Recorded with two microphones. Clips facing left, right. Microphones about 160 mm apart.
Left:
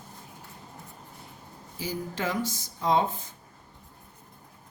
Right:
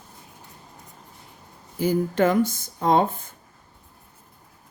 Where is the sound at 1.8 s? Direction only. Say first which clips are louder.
Right 11 dB; 55° right (ahead or behind).